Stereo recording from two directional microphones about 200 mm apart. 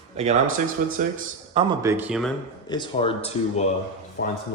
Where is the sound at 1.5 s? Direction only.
20° right (ahead or behind).